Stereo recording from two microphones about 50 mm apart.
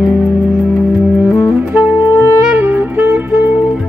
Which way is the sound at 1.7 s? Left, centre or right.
Right.